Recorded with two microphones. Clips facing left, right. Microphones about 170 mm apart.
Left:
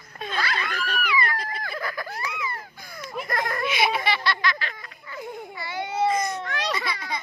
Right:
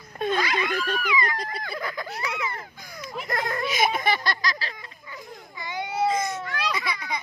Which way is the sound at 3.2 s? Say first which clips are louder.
Even; 20° right (ahead or behind).